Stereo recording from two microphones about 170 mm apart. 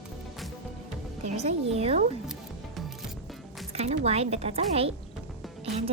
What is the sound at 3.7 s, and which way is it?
Speech, 40° right (ahead or behind).